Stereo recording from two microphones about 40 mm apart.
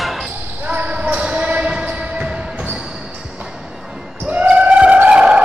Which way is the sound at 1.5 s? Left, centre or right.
Right.